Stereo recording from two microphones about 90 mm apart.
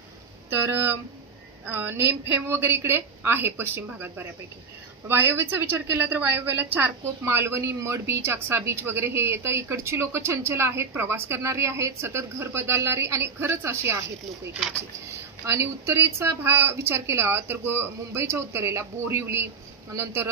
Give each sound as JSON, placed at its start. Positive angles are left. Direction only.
{"t": 0.5, "sound": "a woman's voice", "side_deg": -25}
{"t": 15.4, "sound": "a woman's voice", "side_deg": -25}